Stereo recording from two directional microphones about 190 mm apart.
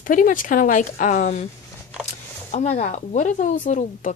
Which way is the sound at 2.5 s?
35° left (ahead or behind).